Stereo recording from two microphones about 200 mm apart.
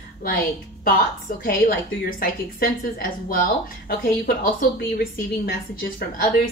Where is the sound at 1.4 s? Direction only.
45° left (ahead or behind).